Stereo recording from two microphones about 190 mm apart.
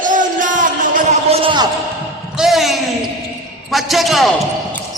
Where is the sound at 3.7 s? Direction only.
Centre (ahead or behind).